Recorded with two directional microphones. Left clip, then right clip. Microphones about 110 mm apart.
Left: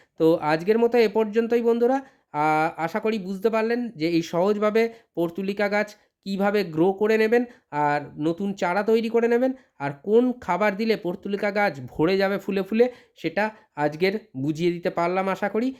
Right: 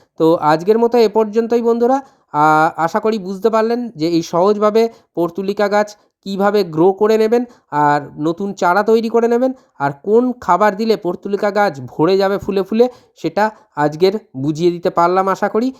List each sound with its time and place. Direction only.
0.2 s speech: 35° right (ahead or behind)